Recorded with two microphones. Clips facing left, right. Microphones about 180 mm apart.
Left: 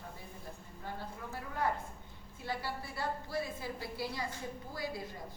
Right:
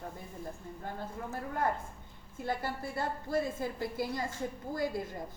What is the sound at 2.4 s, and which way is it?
A woman's voice, 50° right (ahead or behind).